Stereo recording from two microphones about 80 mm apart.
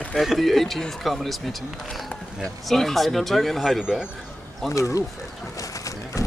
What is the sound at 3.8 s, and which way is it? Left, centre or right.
Speech, centre.